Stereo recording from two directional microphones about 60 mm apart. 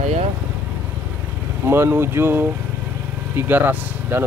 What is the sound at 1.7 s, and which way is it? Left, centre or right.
Speech, right.